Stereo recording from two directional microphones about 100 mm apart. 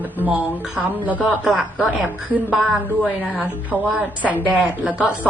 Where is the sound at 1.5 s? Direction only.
10° right (ahead or behind).